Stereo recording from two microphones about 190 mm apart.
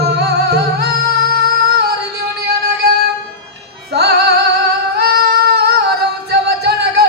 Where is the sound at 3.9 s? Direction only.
60° right (ahead or behind).